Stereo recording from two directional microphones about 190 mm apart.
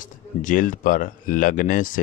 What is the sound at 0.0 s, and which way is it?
Speech, 45° left (ahead or behind).